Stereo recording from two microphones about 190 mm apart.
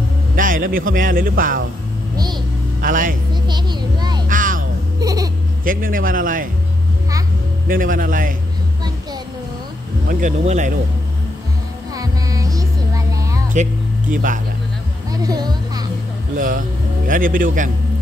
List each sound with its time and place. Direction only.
0.4 s speech: 45° right (ahead or behind)
2.8 s speech: 45° right (ahead or behind)
3.4 s a sound: 20° right (ahead or behind)
4.3 s music: 45° right (ahead or behind)
5.0 s a sound: 20° right (ahead or behind)
5.7 s speech: 45° right (ahead or behind)
7.6 s speech: 45° right (ahead or behind)
10.0 s speech: 40° right (ahead or behind)
11.9 s music: 20° right (ahead or behind)
14.1 s speech: 45° right (ahead or behind)
15.2 s a sound: 20° right (ahead or behind)
16.3 s music: 45° right (ahead or behind)
17.1 s speech: 45° right (ahead or behind)